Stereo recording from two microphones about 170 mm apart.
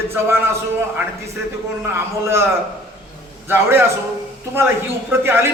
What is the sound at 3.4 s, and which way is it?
Speech, 15° right (ahead or behind).